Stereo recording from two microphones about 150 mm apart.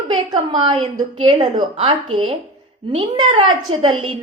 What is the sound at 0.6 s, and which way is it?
A woman's voice, 35° right (ahead or behind).